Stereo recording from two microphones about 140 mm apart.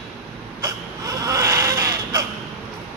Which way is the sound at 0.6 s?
25° right (ahead or behind).